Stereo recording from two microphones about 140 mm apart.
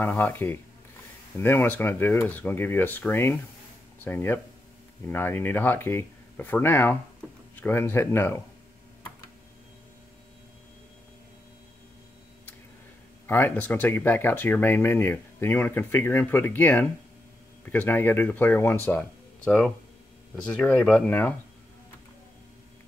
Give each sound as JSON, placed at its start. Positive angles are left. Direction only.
{"t": 0.0, "sound": "speech", "side_deg": 15}
{"t": 13.3, "sound": "speech", "side_deg": 15}